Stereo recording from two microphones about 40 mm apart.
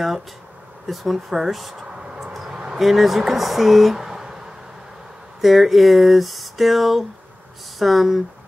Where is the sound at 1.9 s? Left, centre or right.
Right.